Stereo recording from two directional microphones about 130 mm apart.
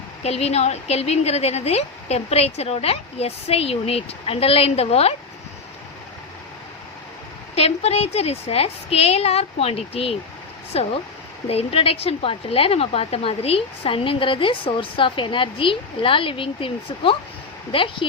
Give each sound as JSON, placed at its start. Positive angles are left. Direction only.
{"t": 0.2, "sound": "a woman's voice", "side_deg": 55}
{"t": 7.5, "sound": "a woman's voice", "side_deg": 55}